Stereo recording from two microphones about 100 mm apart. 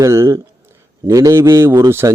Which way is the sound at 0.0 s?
30° right (ahead or behind).